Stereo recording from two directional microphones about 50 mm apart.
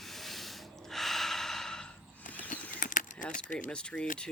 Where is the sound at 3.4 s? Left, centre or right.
Left.